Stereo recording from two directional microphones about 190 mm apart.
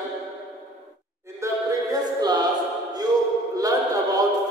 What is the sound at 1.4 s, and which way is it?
Music, 20° right (ahead or behind).